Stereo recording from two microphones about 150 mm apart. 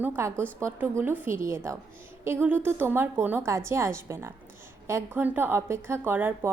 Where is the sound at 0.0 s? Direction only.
15° right (ahead or behind).